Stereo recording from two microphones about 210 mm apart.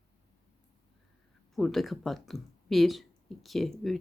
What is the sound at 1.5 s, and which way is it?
Speech, centre (ahead or behind).